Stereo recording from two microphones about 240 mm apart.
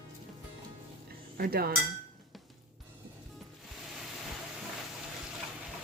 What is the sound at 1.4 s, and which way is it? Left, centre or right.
Speech, right.